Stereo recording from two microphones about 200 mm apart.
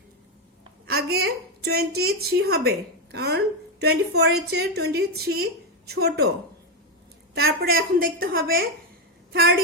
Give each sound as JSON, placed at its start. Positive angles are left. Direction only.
{"t": 0.9, "sound": "a woman's voice", "side_deg": -50}
{"t": 7.3, "sound": "a woman's voice", "side_deg": -50}